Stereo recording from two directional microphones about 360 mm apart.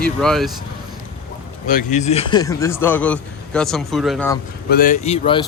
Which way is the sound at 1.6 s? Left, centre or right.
Left.